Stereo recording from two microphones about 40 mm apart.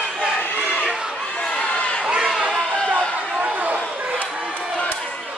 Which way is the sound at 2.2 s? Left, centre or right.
Centre.